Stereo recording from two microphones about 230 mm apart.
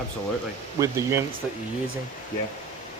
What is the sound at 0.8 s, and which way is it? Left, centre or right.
Speech, centre.